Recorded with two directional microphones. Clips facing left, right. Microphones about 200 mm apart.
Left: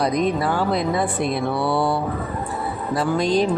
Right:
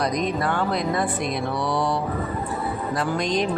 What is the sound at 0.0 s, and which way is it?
Speech, 5° left (ahead or behind).